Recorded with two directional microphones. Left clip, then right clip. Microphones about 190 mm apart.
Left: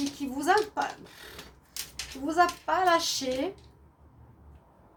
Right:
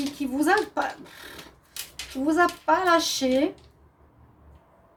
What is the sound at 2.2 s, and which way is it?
Speech, 45° right (ahead or behind).